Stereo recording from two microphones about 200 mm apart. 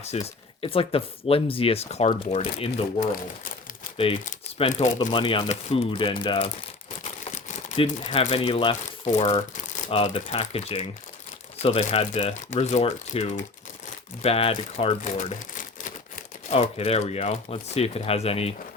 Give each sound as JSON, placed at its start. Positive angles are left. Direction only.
{"t": 0.0, "sound": "speech", "side_deg": 30}
{"t": 7.0, "sound": "crumpling", "side_deg": 35}
{"t": 9.0, "sound": "speech", "side_deg": 35}